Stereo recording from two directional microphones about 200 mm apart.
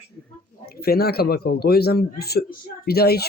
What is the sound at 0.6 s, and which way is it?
A man's voice, 50° left (ahead or behind).